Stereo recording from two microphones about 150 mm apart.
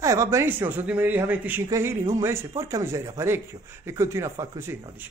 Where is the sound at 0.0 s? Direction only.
20° right (ahead or behind).